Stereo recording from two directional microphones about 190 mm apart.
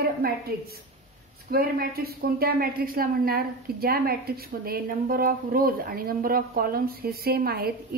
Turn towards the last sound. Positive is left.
turn(degrees=-55)  # may be behind; listen again after turning